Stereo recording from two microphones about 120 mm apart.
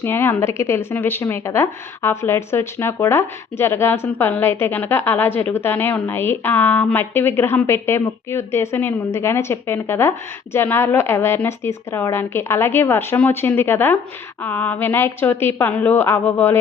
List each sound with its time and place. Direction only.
0.0 s a woman's voice: 20° left (ahead or behind)